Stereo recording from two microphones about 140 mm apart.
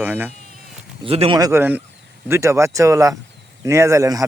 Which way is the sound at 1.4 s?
25° right (ahead or behind).